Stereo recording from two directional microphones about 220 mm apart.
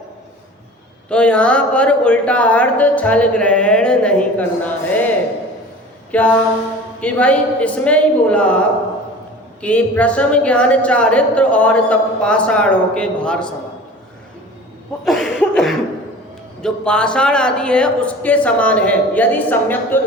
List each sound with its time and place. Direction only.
1.1 s a woman's voice: 5° left (ahead or behind)
6.1 s a sound: 5° left (ahead or behind)
7.0 s a woman's voice: 5° left (ahead or behind)
15.0 s chuckle: centre (ahead or behind)
16.6 s a woman's voice: 5° left (ahead or behind)